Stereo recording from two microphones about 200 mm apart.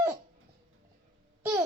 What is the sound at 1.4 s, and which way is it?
Babbling, 15° right (ahead or behind).